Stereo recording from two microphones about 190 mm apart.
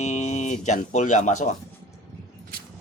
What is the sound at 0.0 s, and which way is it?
Speech, 35° left (ahead or behind).